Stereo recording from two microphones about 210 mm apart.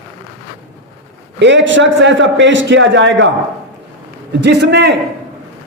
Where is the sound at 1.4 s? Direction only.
60° right (ahead or behind).